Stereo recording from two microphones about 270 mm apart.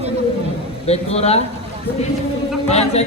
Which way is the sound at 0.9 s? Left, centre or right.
Left.